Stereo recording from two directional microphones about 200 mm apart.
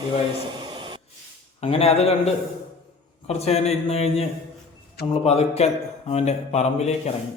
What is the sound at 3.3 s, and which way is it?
Speech, 30° left (ahead or behind).